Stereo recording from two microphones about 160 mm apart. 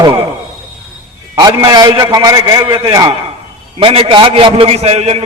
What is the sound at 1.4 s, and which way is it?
A man's voice, 25° right (ahead or behind).